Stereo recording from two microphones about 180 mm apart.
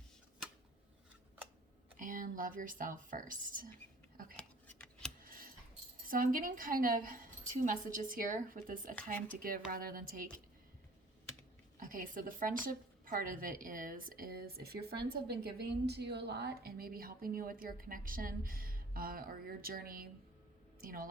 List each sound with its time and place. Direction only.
2.0 s speech: 45° right (ahead or behind)
4.4 s scissors: 5° left (ahead or behind)
5.2 s a sound: 50° right (ahead or behind)
6.1 s a woman's voice: 50° right (ahead or behind)
11.8 s a woman's voice: 50° right (ahead or behind)